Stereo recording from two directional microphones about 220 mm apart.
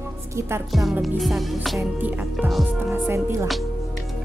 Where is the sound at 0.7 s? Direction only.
Centre (ahead or behind).